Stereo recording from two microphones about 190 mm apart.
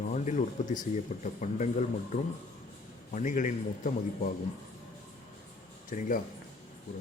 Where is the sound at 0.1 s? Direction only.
40° left (ahead or behind).